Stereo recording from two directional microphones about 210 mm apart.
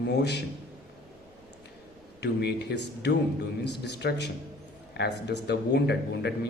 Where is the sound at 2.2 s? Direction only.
55° left (ahead or behind).